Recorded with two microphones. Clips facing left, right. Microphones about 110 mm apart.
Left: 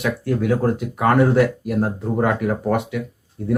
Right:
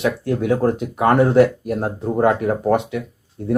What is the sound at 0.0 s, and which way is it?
Speech, 25° right (ahead or behind).